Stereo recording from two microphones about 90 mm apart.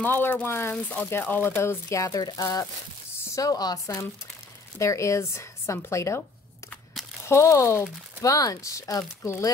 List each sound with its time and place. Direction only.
0.0 s speech: 20° left (ahead or behind)
7.2 s speech: 30° left (ahead or behind)